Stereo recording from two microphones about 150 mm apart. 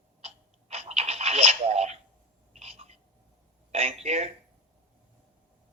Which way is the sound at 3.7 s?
45° right (ahead or behind).